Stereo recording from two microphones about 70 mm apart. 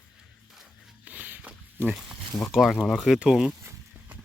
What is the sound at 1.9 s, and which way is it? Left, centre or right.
Speech, centre.